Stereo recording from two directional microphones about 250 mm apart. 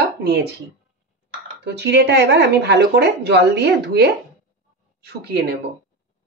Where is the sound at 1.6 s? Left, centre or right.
Right.